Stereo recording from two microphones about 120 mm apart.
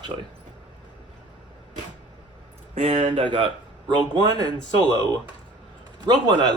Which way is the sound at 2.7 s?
55° right (ahead or behind).